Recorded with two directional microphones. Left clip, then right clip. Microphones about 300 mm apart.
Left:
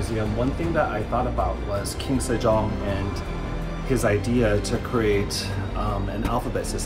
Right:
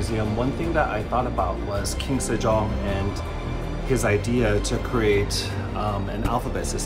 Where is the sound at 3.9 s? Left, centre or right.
Centre.